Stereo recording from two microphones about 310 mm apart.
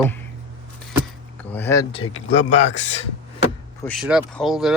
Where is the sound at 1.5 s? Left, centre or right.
Centre.